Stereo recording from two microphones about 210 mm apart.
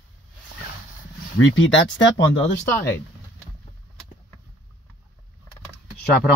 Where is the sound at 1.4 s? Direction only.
60° left (ahead or behind).